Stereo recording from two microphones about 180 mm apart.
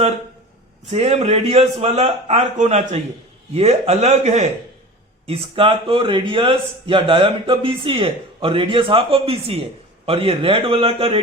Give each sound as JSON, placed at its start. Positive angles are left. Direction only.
{"t": 0.9, "sound": "a man's voice", "side_deg": -35}